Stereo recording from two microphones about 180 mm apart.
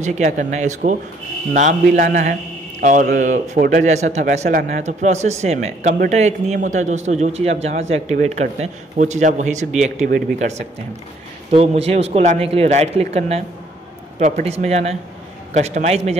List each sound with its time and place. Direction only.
0.0 s speech: 40° right (ahead or behind)
3.8 s speech: 40° right (ahead or behind)
10.0 s speech: 55° right (ahead or behind)
11.5 s speech: 35° right (ahead or behind)